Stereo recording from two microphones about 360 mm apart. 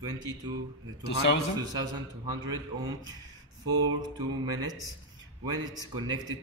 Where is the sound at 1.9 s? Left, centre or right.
Centre.